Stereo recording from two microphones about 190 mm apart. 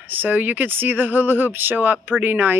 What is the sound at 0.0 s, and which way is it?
Speech, 10° right (ahead or behind).